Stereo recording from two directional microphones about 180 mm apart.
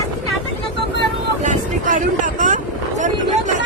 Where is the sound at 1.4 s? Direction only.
45° right (ahead or behind).